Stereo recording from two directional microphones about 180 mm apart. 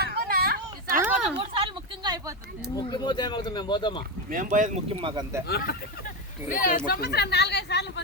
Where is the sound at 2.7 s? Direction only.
25° left (ahead or behind).